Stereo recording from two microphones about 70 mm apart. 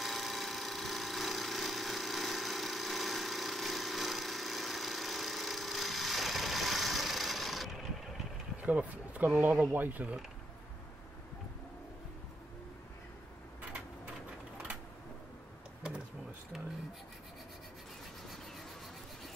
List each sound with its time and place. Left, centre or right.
0.0 s engine: centre
8.6 s speech: right